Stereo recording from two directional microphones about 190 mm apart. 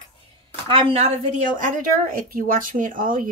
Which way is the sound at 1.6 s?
45° right (ahead or behind).